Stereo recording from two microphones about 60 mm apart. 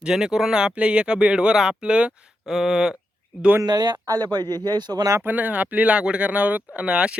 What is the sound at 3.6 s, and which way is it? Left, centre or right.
Speech, right.